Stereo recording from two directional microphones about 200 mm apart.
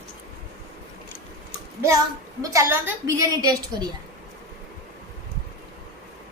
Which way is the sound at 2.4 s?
15° right (ahead or behind).